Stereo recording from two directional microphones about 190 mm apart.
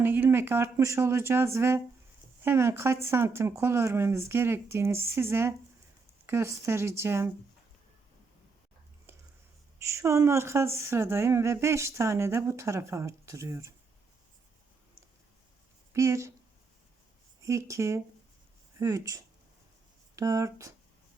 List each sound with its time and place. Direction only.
0.0 s speech: 10° right (ahead or behind)
9.8 s speech: 15° right (ahead or behind)
15.9 s speech: 15° right (ahead or behind)
17.4 s speech: 15° right (ahead or behind)